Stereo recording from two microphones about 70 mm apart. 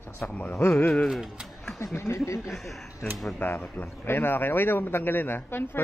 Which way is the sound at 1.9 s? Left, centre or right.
Left.